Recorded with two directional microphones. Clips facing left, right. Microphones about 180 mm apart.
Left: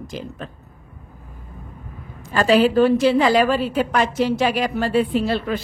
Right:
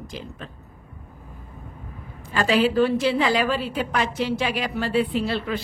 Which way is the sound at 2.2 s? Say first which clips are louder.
Left 5 dB; 45° left (ahead or behind).